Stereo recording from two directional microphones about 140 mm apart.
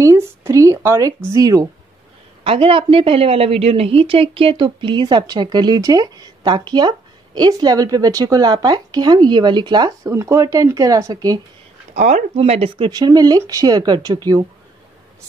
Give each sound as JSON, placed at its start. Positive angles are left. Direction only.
{"t": 0.0, "sound": "speech", "side_deg": -20}
{"t": 2.4, "sound": "a woman's voice", "side_deg": -40}
{"t": 11.9, "sound": "speech", "side_deg": -60}
{"t": 12.4, "sound": "speech", "side_deg": -45}
{"t": 12.9, "sound": "speech", "side_deg": -30}